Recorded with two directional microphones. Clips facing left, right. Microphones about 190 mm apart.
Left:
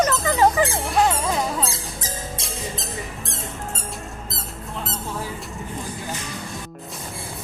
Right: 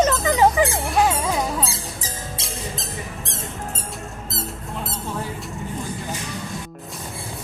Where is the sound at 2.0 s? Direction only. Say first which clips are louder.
Left 1 dB; centre (ahead or behind).